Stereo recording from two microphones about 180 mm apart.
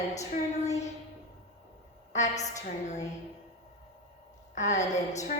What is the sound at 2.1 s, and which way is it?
Speech, 40° left (ahead or behind).